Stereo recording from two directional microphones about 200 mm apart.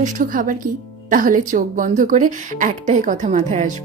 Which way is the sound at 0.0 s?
40° right (ahead or behind).